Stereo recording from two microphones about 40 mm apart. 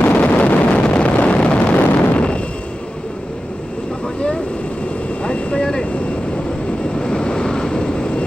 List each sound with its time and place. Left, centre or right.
0.0 s vehicle: left
1.8 s wind noise: left
2.1 s a sound: left
5.2 s vehicle: left
7.0 s vehicle: left